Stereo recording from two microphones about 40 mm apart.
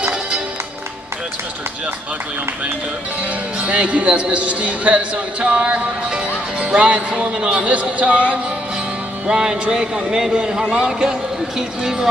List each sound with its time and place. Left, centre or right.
3.6 s a man's voice: right
7.5 s a man's voice: right
9.3 s a man's voice: centre
10.6 s speech: centre